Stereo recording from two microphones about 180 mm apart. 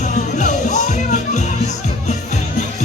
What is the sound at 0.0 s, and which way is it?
Music, 40° left (ahead or behind).